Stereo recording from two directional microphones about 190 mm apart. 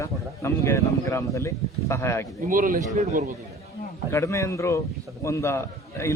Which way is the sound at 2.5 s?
45° right (ahead or behind).